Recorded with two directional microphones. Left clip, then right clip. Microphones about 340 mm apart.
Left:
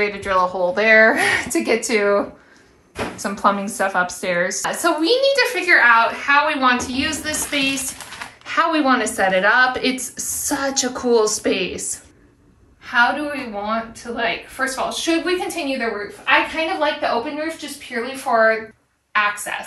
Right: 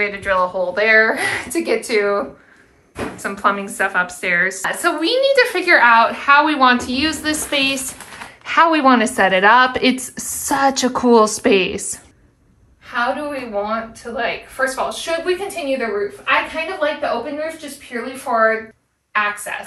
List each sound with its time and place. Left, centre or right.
0.0 s speech: centre
3.2 s a woman's voice: centre
12.8 s a woman's voice: centre
19.1 s a woman's voice: centre